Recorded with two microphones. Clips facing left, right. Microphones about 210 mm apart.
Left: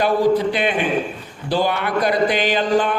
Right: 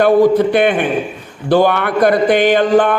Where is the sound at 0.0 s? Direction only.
55° right (ahead or behind).